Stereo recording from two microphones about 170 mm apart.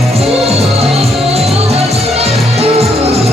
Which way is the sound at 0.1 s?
35° right (ahead or behind).